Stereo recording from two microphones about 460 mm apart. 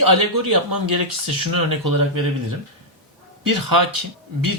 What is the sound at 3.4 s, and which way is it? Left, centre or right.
Speech, right.